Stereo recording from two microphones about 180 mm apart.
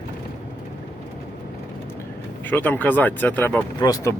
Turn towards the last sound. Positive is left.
turn(degrees=20)  # may be behind; listen again after turning